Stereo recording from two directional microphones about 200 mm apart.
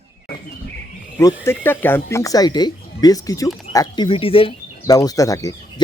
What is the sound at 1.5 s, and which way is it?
Speech, 10° left (ahead or behind).